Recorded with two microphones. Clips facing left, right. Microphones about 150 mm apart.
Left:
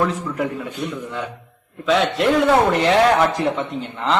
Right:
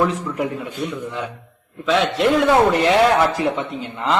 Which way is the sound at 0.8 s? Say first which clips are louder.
Right 2 dB; 10° right (ahead or behind).